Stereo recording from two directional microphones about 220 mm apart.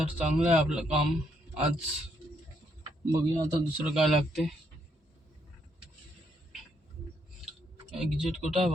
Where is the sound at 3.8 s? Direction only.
Centre (ahead or behind).